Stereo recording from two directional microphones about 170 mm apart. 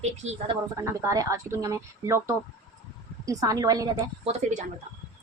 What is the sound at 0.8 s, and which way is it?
A woman's voice, 15° right (ahead or behind).